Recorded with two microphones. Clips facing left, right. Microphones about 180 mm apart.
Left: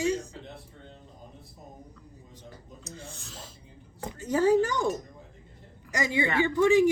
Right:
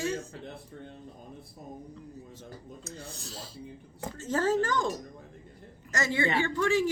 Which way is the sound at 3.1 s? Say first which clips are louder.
Right 3 dB; 35° right (ahead or behind).